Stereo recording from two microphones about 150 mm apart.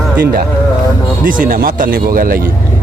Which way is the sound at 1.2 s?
65° right (ahead or behind).